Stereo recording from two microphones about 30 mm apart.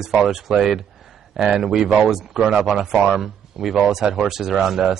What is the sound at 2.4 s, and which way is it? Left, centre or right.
Speech, centre.